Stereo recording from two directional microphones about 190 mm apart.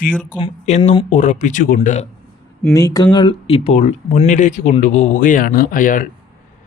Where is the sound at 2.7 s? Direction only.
20° left (ahead or behind); by 6.1 s 45° left (ahead or behind).